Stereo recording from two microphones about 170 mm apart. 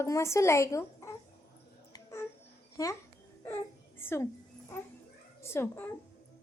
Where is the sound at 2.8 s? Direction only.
20° left (ahead or behind).